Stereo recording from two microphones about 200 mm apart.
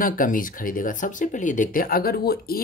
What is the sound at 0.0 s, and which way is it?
Speech, 45° left (ahead or behind).